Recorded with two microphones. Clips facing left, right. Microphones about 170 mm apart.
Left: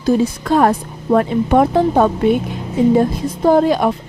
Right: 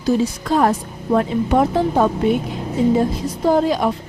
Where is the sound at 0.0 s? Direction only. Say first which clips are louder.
Left 3 dB; 55° left (ahead or behind).